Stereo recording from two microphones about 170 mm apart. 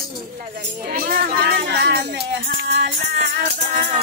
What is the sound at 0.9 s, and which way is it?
Speech, 55° right (ahead or behind).